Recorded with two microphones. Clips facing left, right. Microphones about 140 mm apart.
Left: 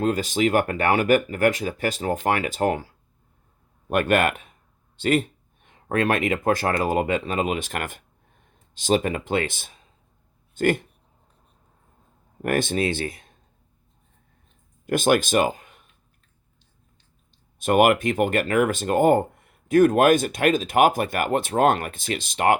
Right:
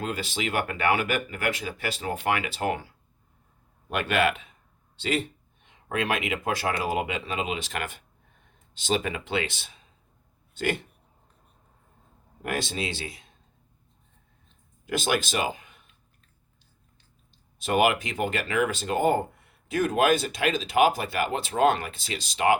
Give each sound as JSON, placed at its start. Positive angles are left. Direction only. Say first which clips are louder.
{"t": 0.0, "sound": "speech", "louder": "left 9 dB", "side_deg": 45}
{"t": 3.8, "sound": "speech", "louder": "left 4 dB", "side_deg": 50}
{"t": 12.4, "sound": "speech", "louder": "left 8 dB", "side_deg": 50}
{"t": 14.8, "sound": "speech", "louder": "left 7 dB", "side_deg": 50}
{"t": 17.6, "sound": "speech", "louder": "left 5 dB", "side_deg": 50}